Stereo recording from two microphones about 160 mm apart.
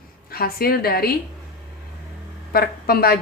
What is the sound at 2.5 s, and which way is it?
Speech, 70° left (ahead or behind).